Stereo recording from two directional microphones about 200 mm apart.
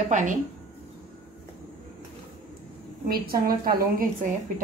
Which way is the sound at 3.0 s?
50° right (ahead or behind).